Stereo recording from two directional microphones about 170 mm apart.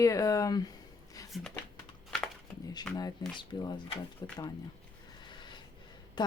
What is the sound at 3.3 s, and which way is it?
A woman's voice, 25° left (ahead or behind).